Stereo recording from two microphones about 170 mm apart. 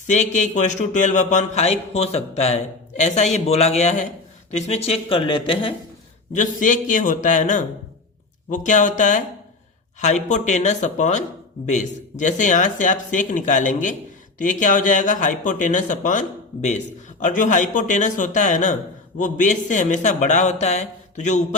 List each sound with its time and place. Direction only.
0.1 s speech: 45° left (ahead or behind)
6.3 s speech: 50° left (ahead or behind)